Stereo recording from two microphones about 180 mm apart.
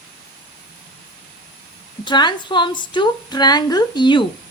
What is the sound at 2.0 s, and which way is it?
A woman's voice, 25° left (ahead or behind).